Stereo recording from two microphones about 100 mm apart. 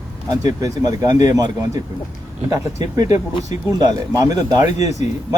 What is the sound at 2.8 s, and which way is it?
Speech, 40° right (ahead or behind).